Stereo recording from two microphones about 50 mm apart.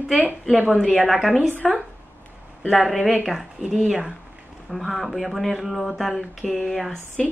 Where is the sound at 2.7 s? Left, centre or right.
Centre.